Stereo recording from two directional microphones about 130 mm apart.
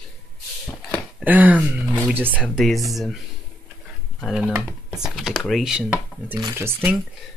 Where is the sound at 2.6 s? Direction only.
Centre (ahead or behind).